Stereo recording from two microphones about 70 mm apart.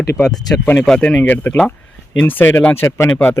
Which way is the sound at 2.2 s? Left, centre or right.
Left.